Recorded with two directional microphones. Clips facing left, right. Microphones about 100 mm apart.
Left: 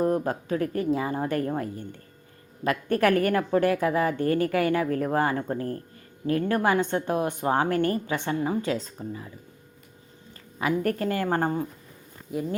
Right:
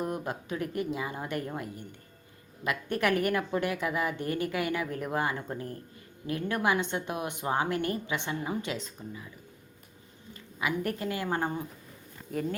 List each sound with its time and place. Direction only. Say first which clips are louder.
0.0 s a woman's voice: left 9 dB; 35° left (ahead or behind)
2.6 s a woman's voice: left 6 dB; 40° left (ahead or behind)
6.2 s a woman's voice: left 6 dB; 40° left (ahead or behind)
10.6 s a woman's voice: left 6 dB; 40° left (ahead or behind)
12.3 s speech: left 3 dB; 5° left (ahead or behind)